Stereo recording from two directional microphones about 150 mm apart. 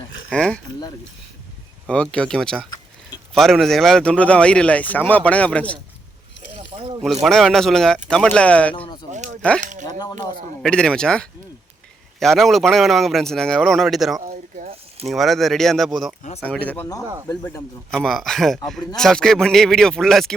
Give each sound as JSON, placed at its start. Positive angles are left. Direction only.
{"t": 0.3, "sound": "speech", "side_deg": 5}
{"t": 1.9, "sound": "a man's voice", "side_deg": 5}
{"t": 7.0, "sound": "a man's voice", "side_deg": 0}
{"t": 9.1, "sound": "a sound", "side_deg": -55}
{"t": 10.6, "sound": "a man's voice", "side_deg": 5}